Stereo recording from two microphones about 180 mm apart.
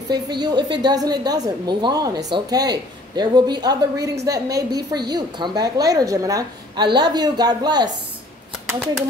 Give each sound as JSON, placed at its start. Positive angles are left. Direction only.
{"t": 0.1, "sound": "a woman's voice", "side_deg": -25}